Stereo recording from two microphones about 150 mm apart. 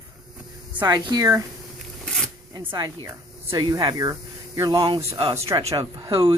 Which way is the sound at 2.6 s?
30° right (ahead or behind).